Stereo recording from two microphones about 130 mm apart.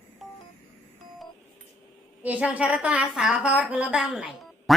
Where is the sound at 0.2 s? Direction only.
Centre (ahead or behind).